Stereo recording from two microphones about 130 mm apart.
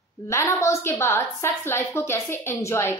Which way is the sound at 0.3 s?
20° left (ahead or behind).